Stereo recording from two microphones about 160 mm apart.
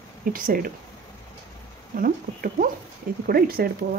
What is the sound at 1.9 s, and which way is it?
Speech, 60° right (ahead or behind).